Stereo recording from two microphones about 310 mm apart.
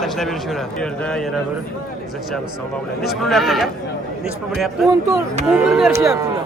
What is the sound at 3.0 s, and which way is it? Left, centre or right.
Speech, centre.